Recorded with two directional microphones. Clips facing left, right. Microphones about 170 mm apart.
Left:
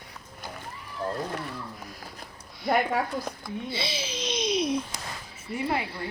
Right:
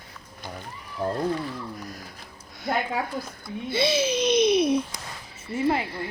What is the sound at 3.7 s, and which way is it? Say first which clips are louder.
A child's voice: right 13 dB; 55° right (ahead or behind).